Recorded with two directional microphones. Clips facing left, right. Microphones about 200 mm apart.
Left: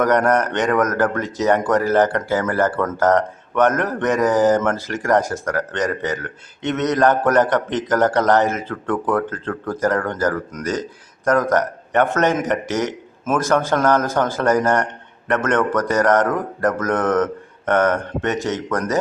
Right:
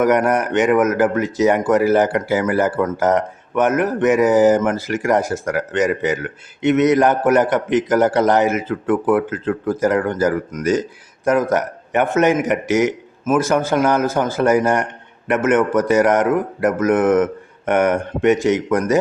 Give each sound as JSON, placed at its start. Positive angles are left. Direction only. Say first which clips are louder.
{"t": 0.0, "sound": "speech", "louder": "right 1 dB", "side_deg": -10}